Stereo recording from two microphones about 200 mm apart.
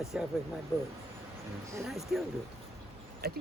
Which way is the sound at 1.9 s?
Centre (ahead or behind).